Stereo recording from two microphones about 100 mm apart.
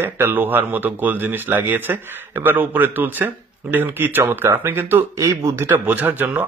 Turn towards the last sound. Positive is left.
turn(degrees=-20)  # may be behind; listen again after turning